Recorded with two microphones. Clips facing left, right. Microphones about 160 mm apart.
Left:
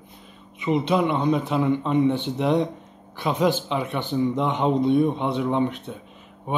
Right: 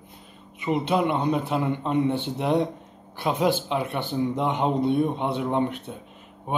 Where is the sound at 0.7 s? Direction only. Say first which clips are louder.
Left 2 dB; 5° right (ahead or behind).